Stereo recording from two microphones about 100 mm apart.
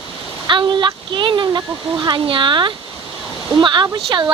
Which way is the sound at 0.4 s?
50° right (ahead or behind).